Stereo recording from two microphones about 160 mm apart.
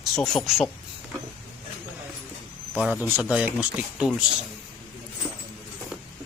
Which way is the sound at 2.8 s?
10° right (ahead or behind).